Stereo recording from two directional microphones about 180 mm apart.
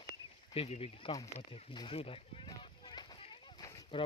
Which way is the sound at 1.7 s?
30° left (ahead or behind).